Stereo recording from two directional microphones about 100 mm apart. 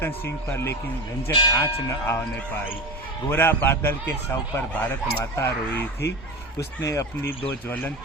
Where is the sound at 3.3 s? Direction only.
20° left (ahead or behind).